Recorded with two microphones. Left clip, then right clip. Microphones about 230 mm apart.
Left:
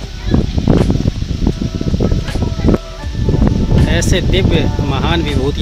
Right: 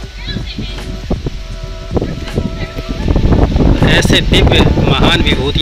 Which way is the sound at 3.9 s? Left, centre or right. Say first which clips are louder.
Right 6 dB; centre.